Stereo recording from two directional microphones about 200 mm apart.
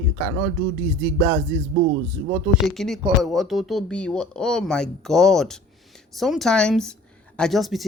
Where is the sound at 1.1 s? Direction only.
20° right (ahead or behind).